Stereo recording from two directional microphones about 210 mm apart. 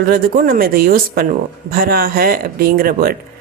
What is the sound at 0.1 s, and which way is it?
Speech, 40° right (ahead or behind).